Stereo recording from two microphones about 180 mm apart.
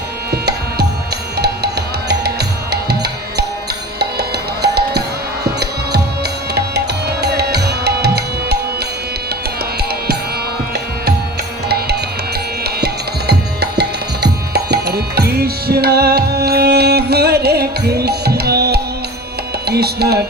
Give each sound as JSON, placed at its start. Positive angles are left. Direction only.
{"t": 0.3, "sound": "tabla", "side_deg": -65}
{"t": 1.4, "sound": "music", "side_deg": -65}
{"t": 4.2, "sound": "music", "side_deg": -65}
{"t": 12.6, "sound": "music", "side_deg": -65}